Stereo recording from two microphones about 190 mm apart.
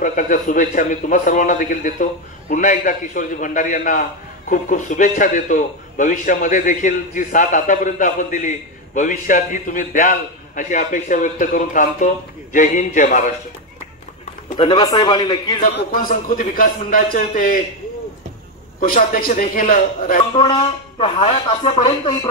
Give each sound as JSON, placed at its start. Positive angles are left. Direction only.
{"t": 0.0, "sound": "a man's voice", "side_deg": 40}
{"t": 14.6, "sound": "speech", "side_deg": 20}
{"t": 15.7, "sound": "a man's voice", "side_deg": 45}
{"t": 18.8, "sound": "a man's voice", "side_deg": 45}
{"t": 20.3, "sound": "speech", "side_deg": 25}